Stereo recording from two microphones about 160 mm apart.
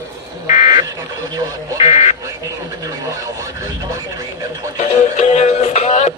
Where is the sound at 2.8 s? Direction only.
20° right (ahead or behind).